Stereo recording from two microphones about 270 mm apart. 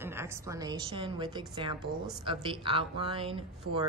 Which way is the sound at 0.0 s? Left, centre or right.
Centre.